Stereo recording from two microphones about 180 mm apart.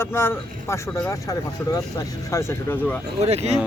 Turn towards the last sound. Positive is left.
turn(degrees=-35)  # may be behind; listen again after turning